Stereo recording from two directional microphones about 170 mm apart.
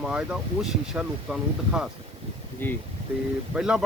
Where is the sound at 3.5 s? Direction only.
5° right (ahead or behind).